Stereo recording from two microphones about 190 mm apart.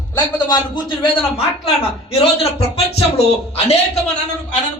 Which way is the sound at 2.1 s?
30° left (ahead or behind).